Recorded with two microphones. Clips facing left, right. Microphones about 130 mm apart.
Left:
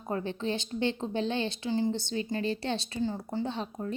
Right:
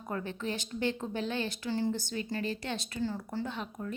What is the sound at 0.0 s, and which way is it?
A woman's voice, 30° left (ahead or behind).